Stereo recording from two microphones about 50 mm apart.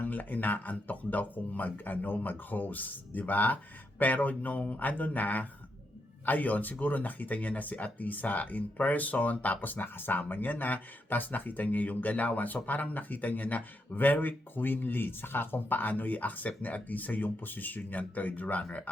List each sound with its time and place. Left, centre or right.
0.0 s speech: left